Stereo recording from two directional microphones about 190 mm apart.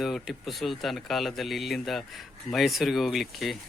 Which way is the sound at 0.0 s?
Centre (ahead or behind).